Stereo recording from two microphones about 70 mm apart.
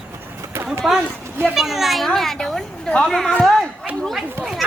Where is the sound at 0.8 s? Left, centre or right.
Centre.